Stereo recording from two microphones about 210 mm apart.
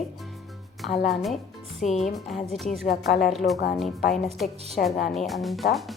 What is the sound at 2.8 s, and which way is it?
Speech, 45° left (ahead or behind).